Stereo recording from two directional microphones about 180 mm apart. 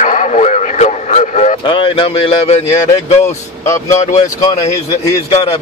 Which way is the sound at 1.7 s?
30° left (ahead or behind).